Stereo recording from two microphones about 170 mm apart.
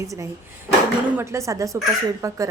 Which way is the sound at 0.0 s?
15° right (ahead or behind).